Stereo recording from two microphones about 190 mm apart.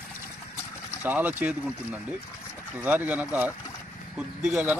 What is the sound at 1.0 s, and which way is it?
Speech, 10° right (ahead or behind).